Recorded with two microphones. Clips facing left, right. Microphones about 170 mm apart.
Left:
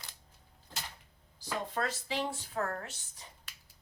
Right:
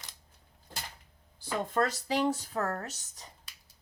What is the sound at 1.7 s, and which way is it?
Speech, 40° right (ahead or behind).